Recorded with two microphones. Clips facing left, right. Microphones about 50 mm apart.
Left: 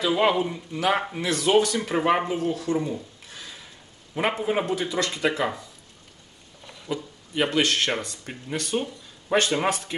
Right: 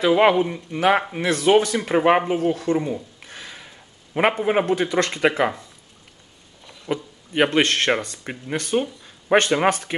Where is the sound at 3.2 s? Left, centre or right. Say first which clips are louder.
Right 3 dB; right.